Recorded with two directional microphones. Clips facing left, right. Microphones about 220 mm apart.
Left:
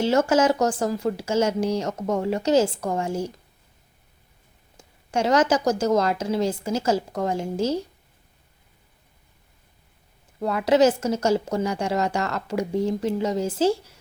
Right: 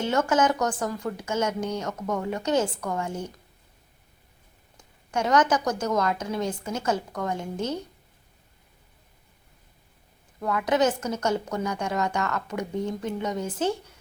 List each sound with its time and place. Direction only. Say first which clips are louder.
0.0 s a woman's voice: left 4 dB; 25° left (ahead or behind)
4.8 s a woman's voice: left 4 dB; 25° left (ahead or behind)
10.4 s a woman's voice: left 5 dB; 25° left (ahead or behind)